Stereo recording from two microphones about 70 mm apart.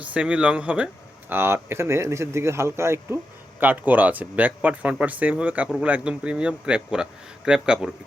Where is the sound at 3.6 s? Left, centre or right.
Right.